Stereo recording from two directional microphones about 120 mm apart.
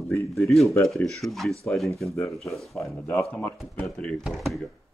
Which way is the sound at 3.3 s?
5° left (ahead or behind).